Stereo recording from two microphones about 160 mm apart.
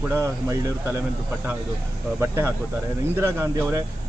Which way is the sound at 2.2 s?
15° right (ahead or behind).